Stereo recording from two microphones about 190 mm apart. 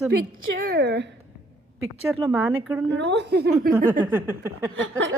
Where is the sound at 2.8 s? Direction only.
65° right (ahead or behind).